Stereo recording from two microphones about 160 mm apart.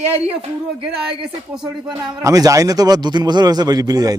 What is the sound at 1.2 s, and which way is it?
Speech, 5° right (ahead or behind).